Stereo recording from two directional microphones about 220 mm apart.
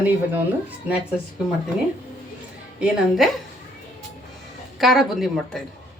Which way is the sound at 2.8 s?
Centre (ahead or behind).